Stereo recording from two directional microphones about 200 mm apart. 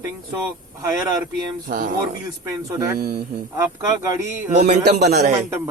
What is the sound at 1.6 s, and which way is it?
Speech, 40° right (ahead or behind).